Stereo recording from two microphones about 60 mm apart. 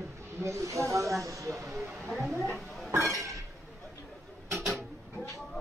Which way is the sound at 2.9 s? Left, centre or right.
Right.